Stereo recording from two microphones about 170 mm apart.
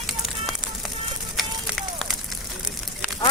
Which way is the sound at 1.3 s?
Centre (ahead or behind).